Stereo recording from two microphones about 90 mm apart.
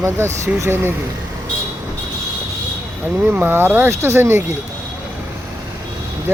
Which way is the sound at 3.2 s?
25° right (ahead or behind).